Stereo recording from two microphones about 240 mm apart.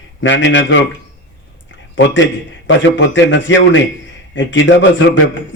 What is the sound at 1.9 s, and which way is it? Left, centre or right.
A man's voice, left.